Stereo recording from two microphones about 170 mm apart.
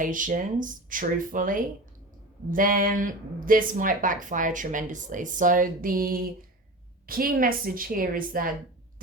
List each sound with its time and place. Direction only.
0.0 s a woman's voice: 50° right (ahead or behind)